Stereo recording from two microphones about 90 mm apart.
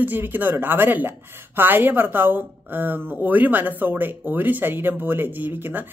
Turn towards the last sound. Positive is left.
turn(degrees=-20)  # may be behind; listen again after turning